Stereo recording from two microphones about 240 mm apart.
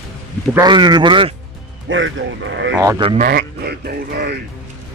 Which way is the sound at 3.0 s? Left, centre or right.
Right.